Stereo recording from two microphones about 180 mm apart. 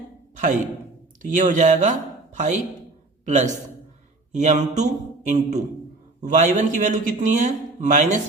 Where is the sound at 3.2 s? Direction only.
40° right (ahead or behind).